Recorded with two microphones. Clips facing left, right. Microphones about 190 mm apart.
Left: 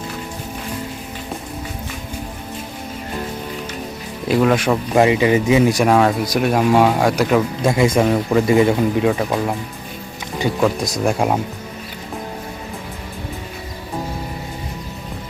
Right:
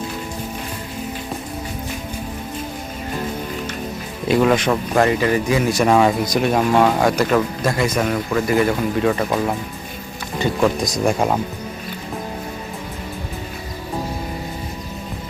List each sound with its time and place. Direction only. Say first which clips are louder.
4.3 s speech: even; centre (ahead or behind)
5.9 s speech: even; centre (ahead or behind)
7.8 s speech: left 6 dB; 25° left (ahead or behind)
9.0 s speech: left 1 dB; 5° left (ahead or behind)
10.6 s speech: even; centre (ahead or behind)